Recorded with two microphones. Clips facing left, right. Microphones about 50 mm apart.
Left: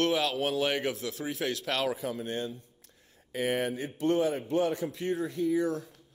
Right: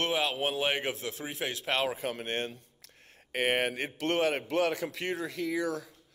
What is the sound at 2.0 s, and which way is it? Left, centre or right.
Speech, right.